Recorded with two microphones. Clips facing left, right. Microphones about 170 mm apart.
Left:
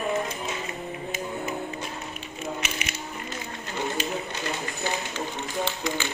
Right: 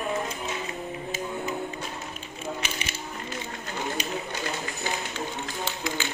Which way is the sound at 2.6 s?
30° right (ahead or behind).